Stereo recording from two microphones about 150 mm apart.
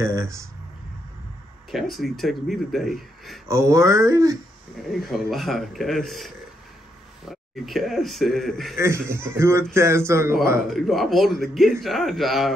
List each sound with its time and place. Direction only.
0.0 s speech: 20° right (ahead or behind)
1.7 s speech: centre (ahead or behind)
3.4 s speech: 20° right (ahead or behind)
5.0 s speech: centre (ahead or behind)
8.7 s speech: 15° right (ahead or behind)
10.7 s speech: centre (ahead or behind)